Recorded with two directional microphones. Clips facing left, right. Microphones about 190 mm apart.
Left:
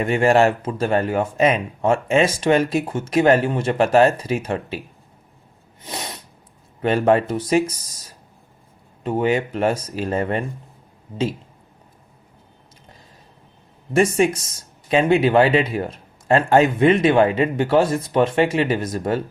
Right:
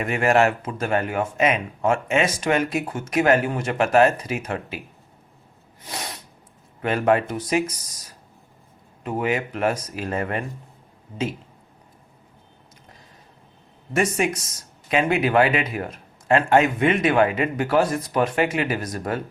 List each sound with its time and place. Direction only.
0.0 s speech: 30° left (ahead or behind)
6.8 s speech: 30° left (ahead or behind)
9.0 s a man's voice: 30° left (ahead or behind)
13.9 s a man's voice: 30° left (ahead or behind)